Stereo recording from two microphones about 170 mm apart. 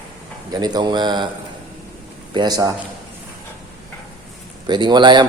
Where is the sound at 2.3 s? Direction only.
25° right (ahead or behind).